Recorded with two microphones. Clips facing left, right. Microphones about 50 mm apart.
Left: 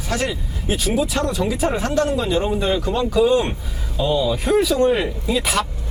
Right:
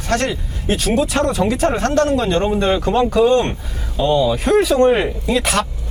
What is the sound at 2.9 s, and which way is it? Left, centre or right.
Speech, right.